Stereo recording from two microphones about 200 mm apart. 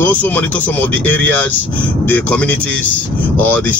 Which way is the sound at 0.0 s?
10° left (ahead or behind).